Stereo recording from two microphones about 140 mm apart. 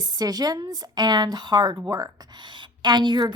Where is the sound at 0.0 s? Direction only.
30° right (ahead or behind).